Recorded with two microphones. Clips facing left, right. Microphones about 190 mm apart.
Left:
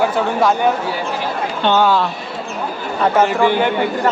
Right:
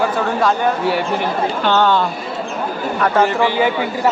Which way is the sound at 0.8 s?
65° right (ahead or behind).